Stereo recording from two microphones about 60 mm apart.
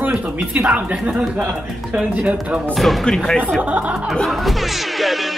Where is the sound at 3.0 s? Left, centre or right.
Centre.